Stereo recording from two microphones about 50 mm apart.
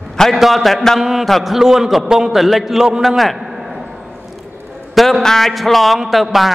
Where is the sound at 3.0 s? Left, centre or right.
Centre.